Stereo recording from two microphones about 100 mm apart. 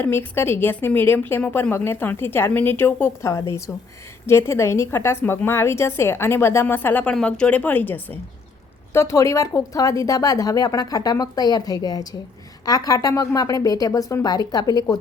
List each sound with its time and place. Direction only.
0.0 s a woman's voice: 25° left (ahead or behind); by 14.9 s 40° left (ahead or behind)